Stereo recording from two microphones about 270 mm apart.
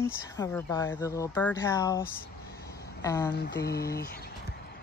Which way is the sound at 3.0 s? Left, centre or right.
Centre.